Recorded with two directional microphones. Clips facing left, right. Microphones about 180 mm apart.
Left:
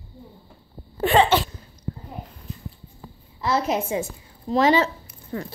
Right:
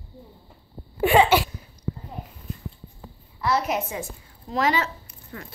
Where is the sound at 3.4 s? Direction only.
25° left (ahead or behind).